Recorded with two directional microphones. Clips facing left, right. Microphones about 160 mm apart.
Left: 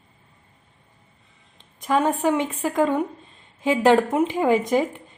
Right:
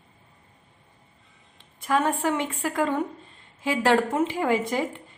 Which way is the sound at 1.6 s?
20° left (ahead or behind).